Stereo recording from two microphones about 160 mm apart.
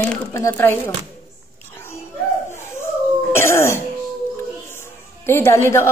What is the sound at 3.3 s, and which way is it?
Cough, 15° left (ahead or behind).